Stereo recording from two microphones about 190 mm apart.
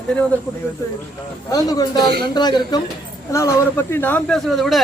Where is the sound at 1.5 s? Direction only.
20° left (ahead or behind).